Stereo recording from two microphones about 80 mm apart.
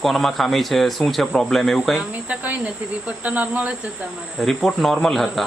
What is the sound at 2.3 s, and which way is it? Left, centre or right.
Speech, centre.